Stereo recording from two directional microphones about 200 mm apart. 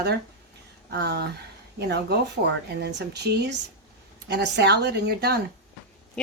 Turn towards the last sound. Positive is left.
turn(degrees=-55)  # may be behind; listen again after turning